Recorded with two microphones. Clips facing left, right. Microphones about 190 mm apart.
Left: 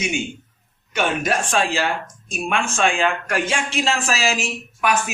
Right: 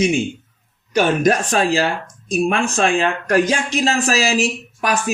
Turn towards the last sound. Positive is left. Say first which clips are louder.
# right 1 dB
turn(degrees=-35)  # may be behind; listen again after turning